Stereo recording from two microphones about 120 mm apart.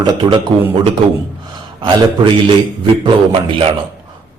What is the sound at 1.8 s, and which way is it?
Speech, 40° right (ahead or behind).